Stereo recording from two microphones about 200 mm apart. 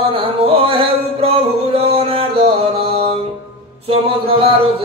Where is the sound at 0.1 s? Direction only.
25° right (ahead or behind).